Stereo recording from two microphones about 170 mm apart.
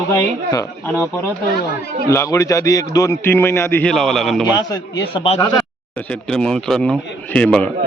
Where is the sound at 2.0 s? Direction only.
20° left (ahead or behind); by 4.4 s centre (ahead or behind).